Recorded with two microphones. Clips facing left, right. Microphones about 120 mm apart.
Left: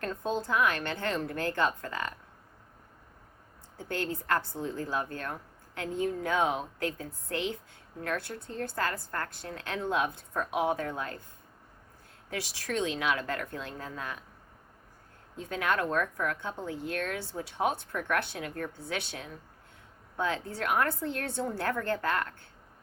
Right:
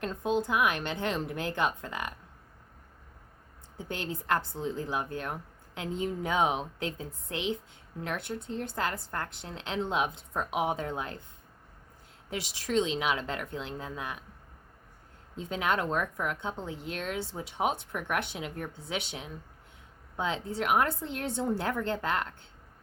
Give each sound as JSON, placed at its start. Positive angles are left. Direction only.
{"t": 0.0, "sound": "a woman's voice", "side_deg": -15}
{"t": 3.8, "sound": "a woman's voice", "side_deg": -20}
{"t": 12.3, "sound": "speech", "side_deg": -20}
{"t": 15.4, "sound": "speech", "side_deg": -20}